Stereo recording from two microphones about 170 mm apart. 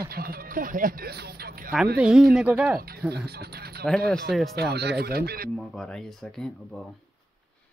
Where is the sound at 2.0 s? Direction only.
5° right (ahead or behind).